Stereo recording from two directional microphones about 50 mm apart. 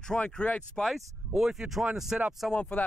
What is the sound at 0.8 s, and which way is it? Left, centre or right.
Speech, centre.